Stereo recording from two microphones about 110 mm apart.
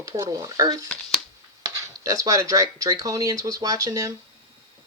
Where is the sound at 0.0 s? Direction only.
35° right (ahead or behind).